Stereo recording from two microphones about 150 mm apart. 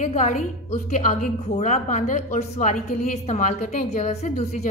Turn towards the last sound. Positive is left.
turn(degrees=45)  # may be behind; listen again after turning